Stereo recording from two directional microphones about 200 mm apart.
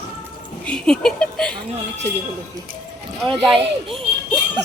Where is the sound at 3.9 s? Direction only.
Centre (ahead or behind).